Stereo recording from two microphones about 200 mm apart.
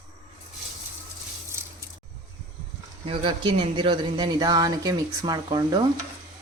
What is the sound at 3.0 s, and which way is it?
Speech, 25° right (ahead or behind).